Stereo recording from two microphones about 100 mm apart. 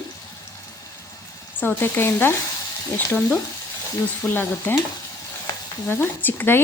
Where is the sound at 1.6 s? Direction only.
20° left (ahead or behind).